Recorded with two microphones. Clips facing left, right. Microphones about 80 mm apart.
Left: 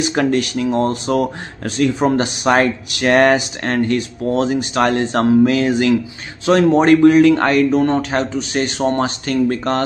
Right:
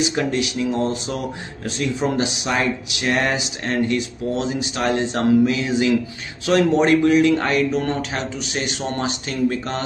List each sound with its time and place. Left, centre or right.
0.0 s speech: left
6.4 s a man's voice: left
6.7 s speech: left